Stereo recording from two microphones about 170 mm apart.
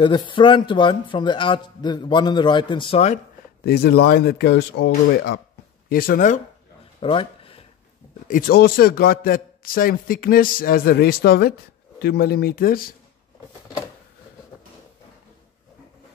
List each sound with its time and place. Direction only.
0.0 s a man's voice: 30° left (ahead or behind)
3.6 s speech: 65° left (ahead or behind); by 5.4 s 90° left
5.9 s speech: 60° left (ahead or behind)
7.0 s a sound: 30° left (ahead or behind)
8.3 s a man's voice: 60° left (ahead or behind)